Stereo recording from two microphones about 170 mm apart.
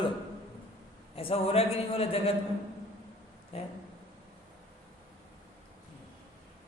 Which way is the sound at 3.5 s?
35° left (ahead or behind).